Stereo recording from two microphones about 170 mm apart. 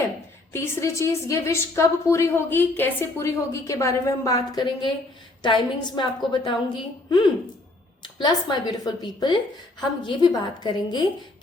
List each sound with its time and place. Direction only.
0.5 s a woman's voice: 15° left (ahead or behind)